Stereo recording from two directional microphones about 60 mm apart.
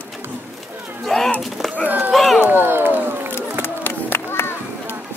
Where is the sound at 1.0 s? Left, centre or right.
Centre.